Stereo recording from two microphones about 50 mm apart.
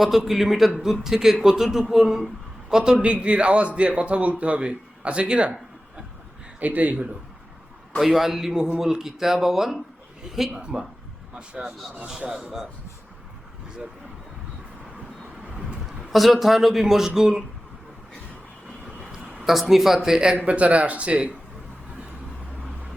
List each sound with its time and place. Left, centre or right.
0.3 s a man's voice: centre; by 5.5 s right
6.6 s speech: right
7.9 s speech: centre
10.5 s speech: centre
16.0 s a man's voice: centre
19.5 s speech: centre
20.3 s a man's voice: right